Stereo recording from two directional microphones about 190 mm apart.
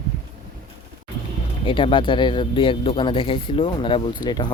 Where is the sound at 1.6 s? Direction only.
25° left (ahead or behind).